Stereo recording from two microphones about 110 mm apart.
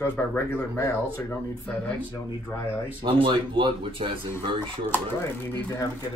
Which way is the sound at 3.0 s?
50° right (ahead or behind).